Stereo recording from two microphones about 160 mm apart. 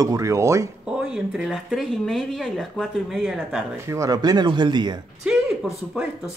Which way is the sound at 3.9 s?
20° right (ahead or behind).